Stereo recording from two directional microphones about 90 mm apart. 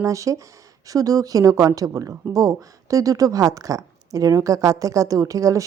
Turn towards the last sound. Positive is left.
turn(degrees=-40)  # may be behind; listen again after turning